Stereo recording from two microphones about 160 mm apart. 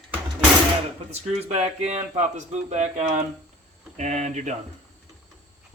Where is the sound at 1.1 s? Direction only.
45° right (ahead or behind).